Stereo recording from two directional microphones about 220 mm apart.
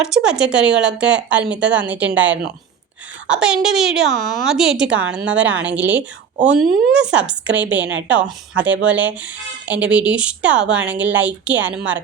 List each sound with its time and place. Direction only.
0.0 s a woman's voice: 5° right (ahead or behind)
2.2 s speech: 55° right (ahead or behind)
3.2 s a woman's voice: 5° right (ahead or behind)